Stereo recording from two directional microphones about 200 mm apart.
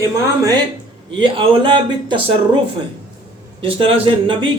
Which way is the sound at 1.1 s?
25° right (ahead or behind).